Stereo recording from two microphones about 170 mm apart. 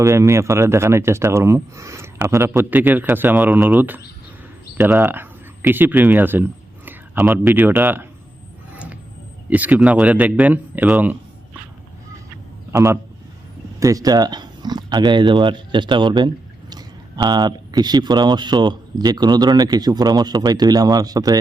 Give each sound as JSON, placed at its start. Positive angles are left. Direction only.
{"t": 0.0, "sound": "speech", "side_deg": -15}
{"t": 8.7, "sound": "vehicle", "side_deg": -10}
{"t": 9.5, "sound": "speech", "side_deg": -10}
{"t": 12.7, "sound": "speech", "side_deg": -15}